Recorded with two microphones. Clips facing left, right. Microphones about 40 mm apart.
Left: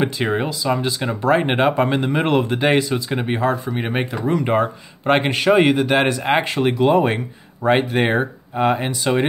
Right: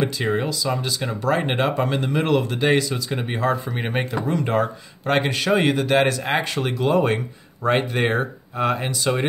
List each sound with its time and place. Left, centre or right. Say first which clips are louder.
0.0 s speech: left 2 dB; left
3.4 s speech: right 1 dB; centre
4.5 s speech: left 3 dB; left